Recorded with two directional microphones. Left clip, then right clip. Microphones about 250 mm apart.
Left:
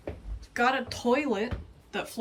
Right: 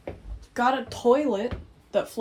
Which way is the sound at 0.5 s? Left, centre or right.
Centre.